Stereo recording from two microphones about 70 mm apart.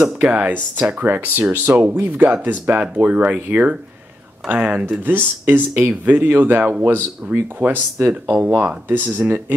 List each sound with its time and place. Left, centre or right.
0.0 s speech: centre